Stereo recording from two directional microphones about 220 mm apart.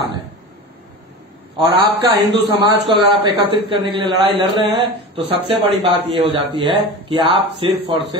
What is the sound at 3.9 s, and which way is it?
A man's voice, 25° right (ahead or behind).